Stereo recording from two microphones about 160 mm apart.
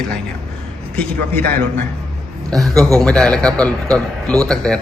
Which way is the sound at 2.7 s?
20° right (ahead or behind).